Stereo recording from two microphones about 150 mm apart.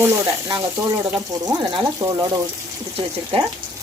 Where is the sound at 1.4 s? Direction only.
30° right (ahead or behind).